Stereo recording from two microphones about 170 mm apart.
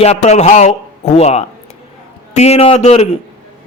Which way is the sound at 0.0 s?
40° left (ahead or behind).